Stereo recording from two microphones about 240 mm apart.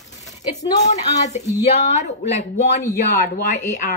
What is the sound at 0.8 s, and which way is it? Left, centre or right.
Speech, left.